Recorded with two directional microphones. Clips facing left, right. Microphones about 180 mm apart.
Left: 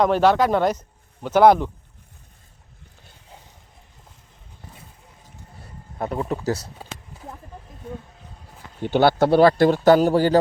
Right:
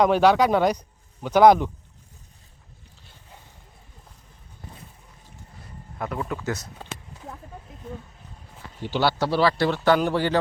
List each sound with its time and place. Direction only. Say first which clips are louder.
0.0 s speech: even; 10° right (ahead or behind)
6.0 s speech: left 4 dB; 30° left (ahead or behind)
8.8 s a man's voice: left 6 dB; 55° left (ahead or behind)